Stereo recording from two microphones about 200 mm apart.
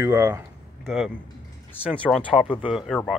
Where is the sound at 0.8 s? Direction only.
Centre (ahead or behind).